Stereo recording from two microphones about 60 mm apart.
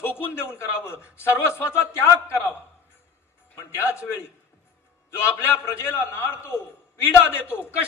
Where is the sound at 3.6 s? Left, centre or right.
Left.